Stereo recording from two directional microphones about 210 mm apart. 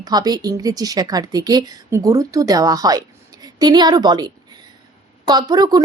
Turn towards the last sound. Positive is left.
turn(degrees=-20)  # may be behind; listen again after turning